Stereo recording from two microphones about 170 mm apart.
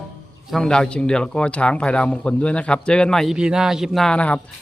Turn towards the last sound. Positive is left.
turn(degrees=5)  # may be behind; listen again after turning